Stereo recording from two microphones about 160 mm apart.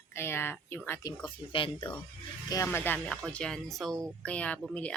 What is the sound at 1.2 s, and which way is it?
Speech, 35° left (ahead or behind).